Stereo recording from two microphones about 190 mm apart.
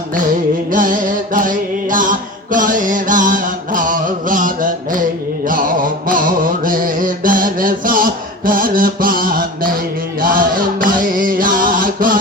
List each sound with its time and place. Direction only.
0.7 s music: 45° right (ahead or behind)
5.5 s mantra: 45° right (ahead or behind)
10.2 s music: 50° right (ahead or behind)